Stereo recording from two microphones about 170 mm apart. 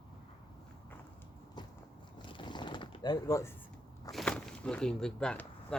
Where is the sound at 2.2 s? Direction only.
30° left (ahead or behind).